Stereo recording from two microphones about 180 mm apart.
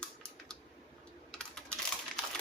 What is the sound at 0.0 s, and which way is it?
Typing, 5° left (ahead or behind).